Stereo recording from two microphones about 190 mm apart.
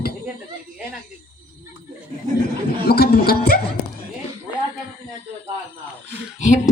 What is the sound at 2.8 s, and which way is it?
Speech, 55° left (ahead or behind).